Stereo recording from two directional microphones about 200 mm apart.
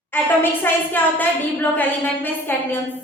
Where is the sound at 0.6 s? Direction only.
10° left (ahead or behind).